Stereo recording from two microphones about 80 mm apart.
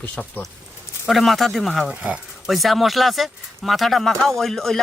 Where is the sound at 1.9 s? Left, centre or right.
Centre.